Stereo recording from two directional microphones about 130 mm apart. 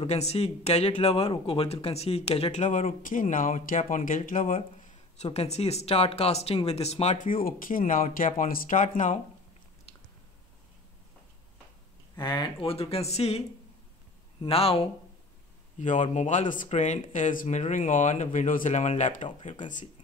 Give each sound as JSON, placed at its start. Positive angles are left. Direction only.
{"t": 0.0, "sound": "speech", "side_deg": 55}
{"t": 2.6, "sound": "speech", "side_deg": 70}
{"t": 4.6, "sound": "speech", "side_deg": 65}
{"t": 7.2, "sound": "speech", "side_deg": 90}
{"t": 12.2, "sound": "speech", "side_deg": 35}
{"t": 14.4, "sound": "speech", "side_deg": 50}
{"t": 15.8, "sound": "speech", "side_deg": 75}